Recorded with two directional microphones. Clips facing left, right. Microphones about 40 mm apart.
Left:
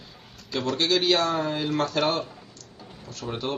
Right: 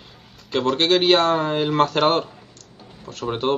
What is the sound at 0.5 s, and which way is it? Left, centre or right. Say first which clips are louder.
Speech: right 6 dB; right.